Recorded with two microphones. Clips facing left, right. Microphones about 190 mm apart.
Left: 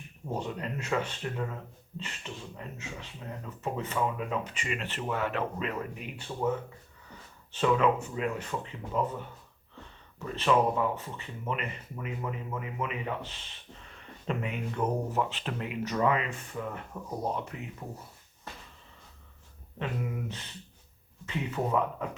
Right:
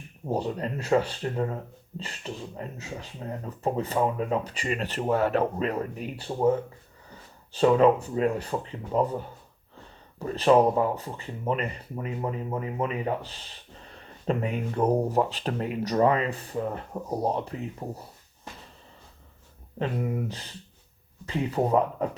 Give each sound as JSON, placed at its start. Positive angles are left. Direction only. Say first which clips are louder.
{"t": 0.3, "sound": "speech", "louder": "right 6 dB", "side_deg": -35}
{"t": 19.8, "sound": "speech", "louder": "right 6 dB", "side_deg": -35}